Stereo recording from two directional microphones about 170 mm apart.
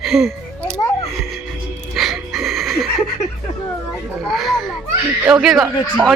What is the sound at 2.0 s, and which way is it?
Music, centre (ahead or behind).